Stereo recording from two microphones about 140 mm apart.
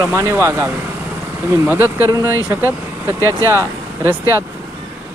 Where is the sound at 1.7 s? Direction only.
15° right (ahead or behind).